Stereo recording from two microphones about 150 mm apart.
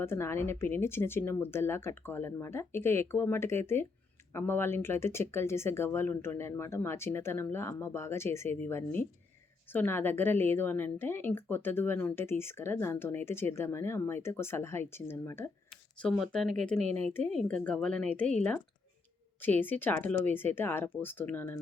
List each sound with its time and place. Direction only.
0.0 s a woman's voice: 15° left (ahead or behind)